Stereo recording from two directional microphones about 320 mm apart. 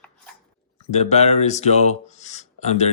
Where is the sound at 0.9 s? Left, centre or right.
Left.